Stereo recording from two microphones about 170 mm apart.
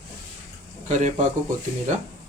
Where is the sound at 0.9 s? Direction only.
45° right (ahead or behind).